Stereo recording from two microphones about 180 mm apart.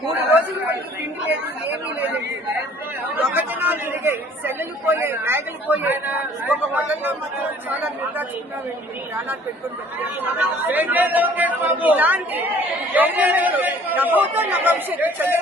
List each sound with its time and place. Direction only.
0.3 s chatter: 10° right (ahead or behind)
3.3 s chatter: 10° right (ahead or behind)
10.0 s speech: 10° right (ahead or behind)